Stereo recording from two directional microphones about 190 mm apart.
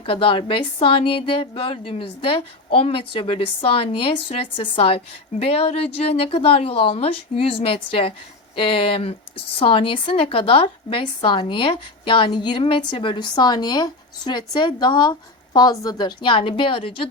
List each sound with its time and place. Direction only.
0.0 s speech: 30° left (ahead or behind)